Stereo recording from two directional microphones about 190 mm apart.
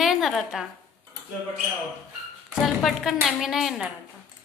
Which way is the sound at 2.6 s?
Centre (ahead or behind).